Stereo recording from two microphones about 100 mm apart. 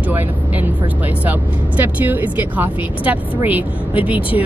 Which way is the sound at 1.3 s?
15° right (ahead or behind).